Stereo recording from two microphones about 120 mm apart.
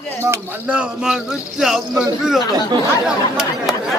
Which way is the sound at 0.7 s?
5° right (ahead or behind).